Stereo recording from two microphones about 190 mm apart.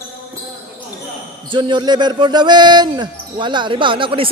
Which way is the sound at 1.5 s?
25° right (ahead or behind).